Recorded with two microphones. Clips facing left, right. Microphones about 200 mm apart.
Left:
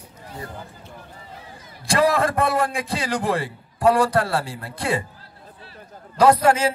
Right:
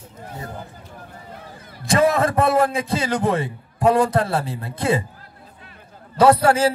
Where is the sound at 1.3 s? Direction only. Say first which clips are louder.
Right 2 dB; 55° right (ahead or behind).